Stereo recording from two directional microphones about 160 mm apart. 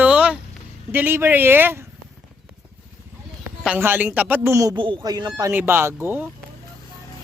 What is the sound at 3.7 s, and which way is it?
A woman's voice, 10° right (ahead or behind).